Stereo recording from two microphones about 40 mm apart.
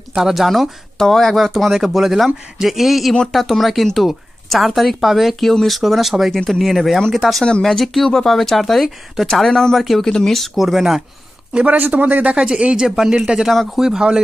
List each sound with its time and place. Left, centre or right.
0.1 s speech: centre
6.3 s speech: centre
9.8 s speech: centre
10.0 s speech: centre
10.5 s speech: centre
11.6 s speech: right
12.4 s speech: right
13.1 s speech: right
13.7 s speech: centre